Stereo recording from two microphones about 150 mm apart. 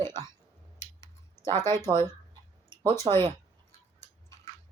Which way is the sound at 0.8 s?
15° left (ahead or behind).